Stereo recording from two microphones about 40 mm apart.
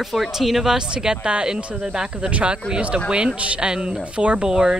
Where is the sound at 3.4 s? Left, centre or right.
Right.